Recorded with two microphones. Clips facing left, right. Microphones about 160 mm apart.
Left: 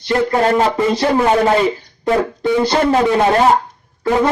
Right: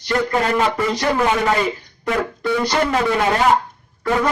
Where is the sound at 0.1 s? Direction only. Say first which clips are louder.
Left 4 dB; 30° left (ahead or behind).